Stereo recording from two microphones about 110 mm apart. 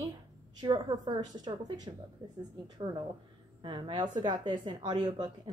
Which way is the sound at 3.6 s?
50° right (ahead or behind).